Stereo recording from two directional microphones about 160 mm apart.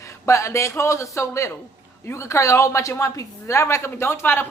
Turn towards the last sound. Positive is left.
turn(degrees=15)  # may be behind; listen again after turning